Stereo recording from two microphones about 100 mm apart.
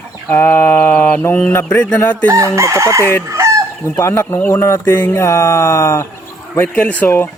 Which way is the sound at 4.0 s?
25° left (ahead or behind).